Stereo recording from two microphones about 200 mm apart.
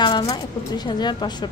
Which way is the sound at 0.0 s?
20° left (ahead or behind).